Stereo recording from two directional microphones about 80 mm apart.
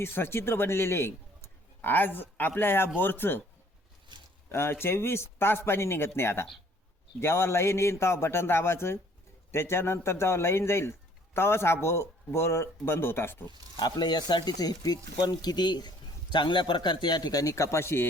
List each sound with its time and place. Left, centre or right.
0.0 s speech: left
4.5 s speech: left
13.7 s speech: left